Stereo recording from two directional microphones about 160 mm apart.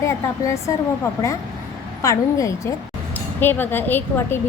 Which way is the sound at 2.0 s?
20° left (ahead or behind).